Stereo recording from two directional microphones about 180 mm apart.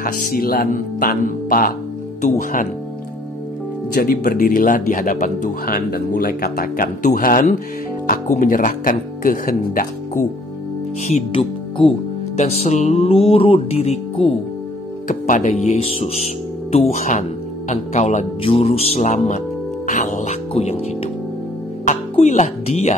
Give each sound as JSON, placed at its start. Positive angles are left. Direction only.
{"t": 0.0, "sound": "speech", "side_deg": 50}
{"t": 3.9, "sound": "speech", "side_deg": 55}
{"t": 11.1, "sound": "speech", "side_deg": 35}
{"t": 15.0, "sound": "speech", "side_deg": 45}
{"t": 19.9, "sound": "music", "side_deg": 45}
{"t": 20.5, "sound": "speech", "side_deg": 35}
{"t": 21.8, "sound": "music", "side_deg": 40}